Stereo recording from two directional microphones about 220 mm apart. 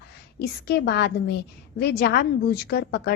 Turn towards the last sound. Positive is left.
turn(degrees=45)  # may be behind; listen again after turning